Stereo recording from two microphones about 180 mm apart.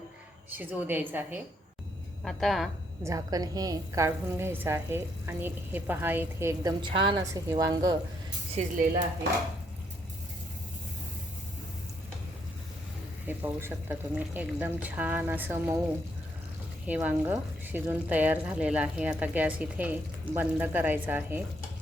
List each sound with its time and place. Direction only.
0.5 s a woman's voice: 10° right (ahead or behind)
2.2 s a woman's voice: centre (ahead or behind)
3.0 s a woman's voice: 20° right (ahead or behind)
8.6 s speech: 40° right (ahead or behind)
13.2 s a woman's voice: 10° right (ahead or behind)
16.8 s a woman's voice: 10° right (ahead or behind)